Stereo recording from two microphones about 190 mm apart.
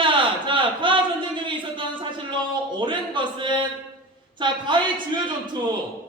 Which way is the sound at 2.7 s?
25° right (ahead or behind).